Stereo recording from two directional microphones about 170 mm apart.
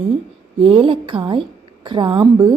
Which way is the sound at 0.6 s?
30° right (ahead or behind).